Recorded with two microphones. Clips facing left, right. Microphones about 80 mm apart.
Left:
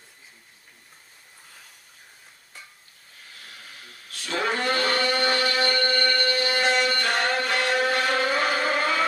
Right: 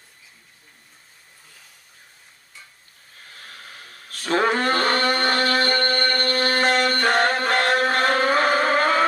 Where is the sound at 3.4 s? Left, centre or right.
Right.